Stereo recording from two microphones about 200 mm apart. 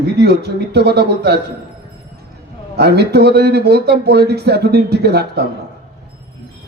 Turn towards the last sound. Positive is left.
turn(degrees=-55)  # may be behind; listen again after turning